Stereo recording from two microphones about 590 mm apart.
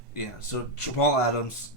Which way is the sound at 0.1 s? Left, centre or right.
Left.